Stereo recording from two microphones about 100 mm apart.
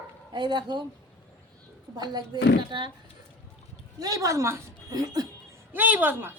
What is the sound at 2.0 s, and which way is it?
Speech, 45° right (ahead or behind).